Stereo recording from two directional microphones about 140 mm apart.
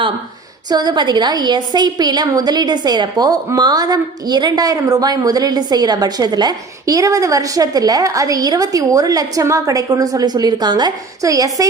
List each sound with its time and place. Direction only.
0.7 s a woman's voice: 30° right (ahead or behind)